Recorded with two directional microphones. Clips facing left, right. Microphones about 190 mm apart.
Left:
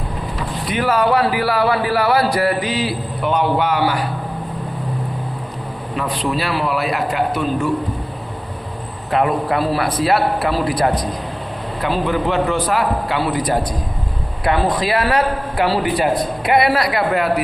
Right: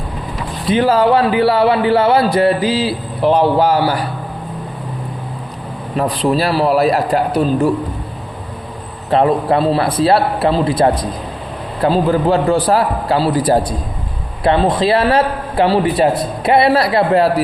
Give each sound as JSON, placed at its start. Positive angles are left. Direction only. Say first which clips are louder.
{"t": 0.7, "sound": "speech", "louder": "right 5 dB", "side_deg": -30}
{"t": 6.0, "sound": "a man's voice", "louder": "right 6 dB", "side_deg": -35}
{"t": 9.0, "sound": "a man's voice", "louder": "right 5 dB", "side_deg": -30}